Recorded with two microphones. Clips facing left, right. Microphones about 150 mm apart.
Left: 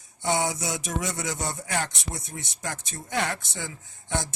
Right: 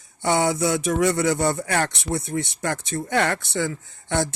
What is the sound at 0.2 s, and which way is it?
Speech, 60° right (ahead or behind).